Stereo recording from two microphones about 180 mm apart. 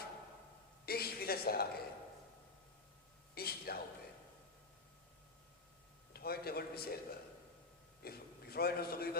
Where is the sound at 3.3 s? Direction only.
60° left (ahead or behind).